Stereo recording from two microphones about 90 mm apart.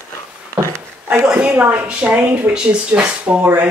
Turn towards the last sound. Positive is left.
turn(degrees=-15)  # may be behind; listen again after turning